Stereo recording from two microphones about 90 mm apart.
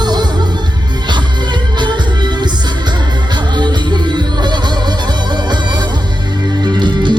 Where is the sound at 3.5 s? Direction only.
55° right (ahead or behind).